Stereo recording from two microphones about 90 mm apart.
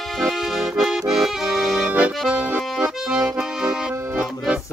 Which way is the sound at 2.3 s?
15° right (ahead or behind).